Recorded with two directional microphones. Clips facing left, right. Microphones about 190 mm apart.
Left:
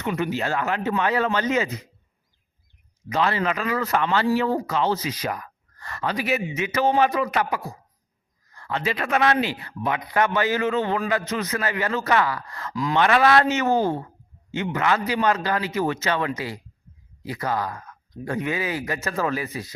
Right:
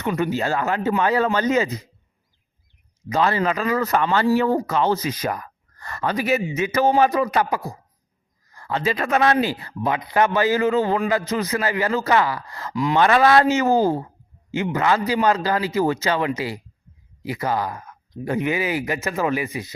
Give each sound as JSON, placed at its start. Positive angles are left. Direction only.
{"t": 0.0, "sound": "speech", "side_deg": -45}
{"t": 3.1, "sound": "speech", "side_deg": -40}